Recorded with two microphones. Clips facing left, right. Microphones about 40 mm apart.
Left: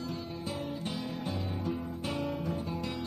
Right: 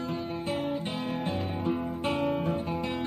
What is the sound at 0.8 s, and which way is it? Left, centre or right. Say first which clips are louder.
Guitar: right 5 dB; right.